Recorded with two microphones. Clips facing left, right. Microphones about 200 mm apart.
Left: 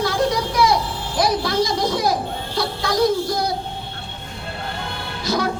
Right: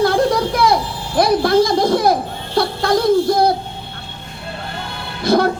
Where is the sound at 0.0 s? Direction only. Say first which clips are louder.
Right 5 dB; 55° right (ahead or behind).